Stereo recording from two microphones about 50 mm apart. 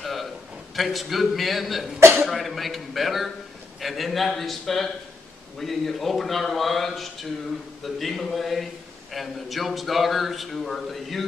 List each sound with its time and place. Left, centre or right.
0.0 s a sound: centre
0.7 s a man's voice: centre
2.0 s speech: right
2.2 s a man's voice: centre